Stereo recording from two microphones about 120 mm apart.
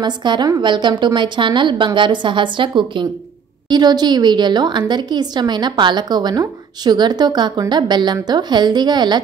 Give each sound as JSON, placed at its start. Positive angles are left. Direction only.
{"t": 0.0, "sound": "a woman's voice", "side_deg": -40}